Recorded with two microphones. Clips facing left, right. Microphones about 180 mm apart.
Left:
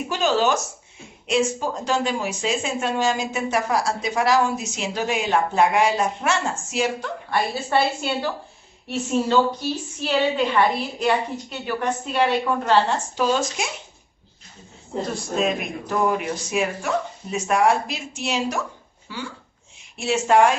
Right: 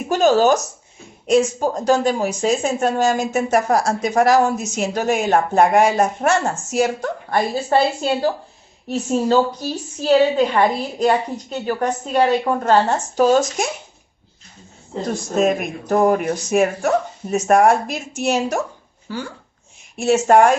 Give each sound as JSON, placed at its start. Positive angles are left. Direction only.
{"t": 0.1, "sound": "a woman's voice", "side_deg": -45}
{"t": 15.1, "sound": "a woman's voice", "side_deg": -45}